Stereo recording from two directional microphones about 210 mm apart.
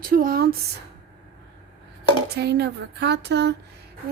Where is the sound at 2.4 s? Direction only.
50° right (ahead or behind).